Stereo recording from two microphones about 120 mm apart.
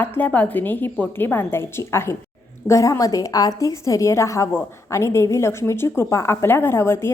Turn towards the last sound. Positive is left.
turn(degrees=20)  # may be behind; listen again after turning